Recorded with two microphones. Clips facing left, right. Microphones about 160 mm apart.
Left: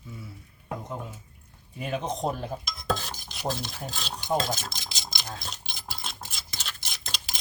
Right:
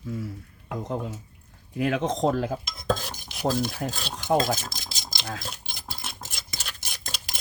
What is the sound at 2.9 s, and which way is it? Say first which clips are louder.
Cutlery: right 1 dB; 10° right (ahead or behind).